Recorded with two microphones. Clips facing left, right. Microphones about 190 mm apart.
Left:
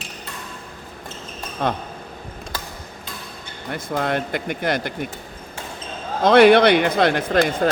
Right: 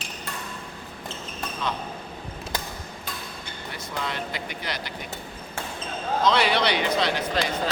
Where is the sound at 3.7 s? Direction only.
55° left (ahead or behind).